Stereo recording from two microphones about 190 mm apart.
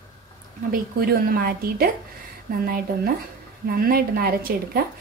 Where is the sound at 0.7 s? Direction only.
50° right (ahead or behind).